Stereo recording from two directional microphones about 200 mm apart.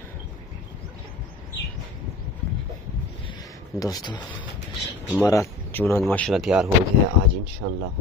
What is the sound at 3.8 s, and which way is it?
Speech, 20° left (ahead or behind).